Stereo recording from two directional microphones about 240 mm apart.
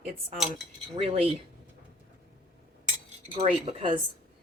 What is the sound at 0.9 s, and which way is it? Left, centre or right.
Speech, right.